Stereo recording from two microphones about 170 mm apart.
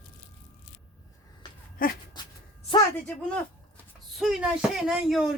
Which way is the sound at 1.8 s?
55° left (ahead or behind).